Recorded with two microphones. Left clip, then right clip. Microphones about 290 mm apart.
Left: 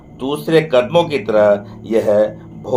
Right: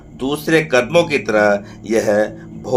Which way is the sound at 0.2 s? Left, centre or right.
Right.